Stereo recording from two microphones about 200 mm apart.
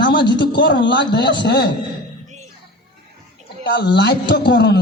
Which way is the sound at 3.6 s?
60° left (ahead or behind).